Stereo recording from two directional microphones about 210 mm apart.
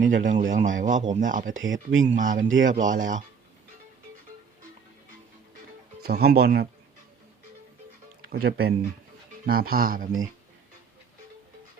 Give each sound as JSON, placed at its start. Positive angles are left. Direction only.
{"t": 0.0, "sound": "speech", "side_deg": -40}
{"t": 1.5, "sound": "speech", "side_deg": -65}
{"t": 2.0, "sound": "speech", "side_deg": -40}
{"t": 2.5, "sound": "speech", "side_deg": -65}
{"t": 2.7, "sound": "speech", "side_deg": -40}
{"t": 6.0, "sound": "speech", "side_deg": -45}
{"t": 8.3, "sound": "speech", "side_deg": -50}